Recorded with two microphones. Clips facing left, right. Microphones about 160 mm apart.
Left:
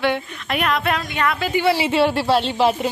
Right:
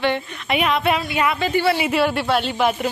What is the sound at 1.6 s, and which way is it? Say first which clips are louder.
A woman's voice: left 4 dB; 25° left (ahead or behind).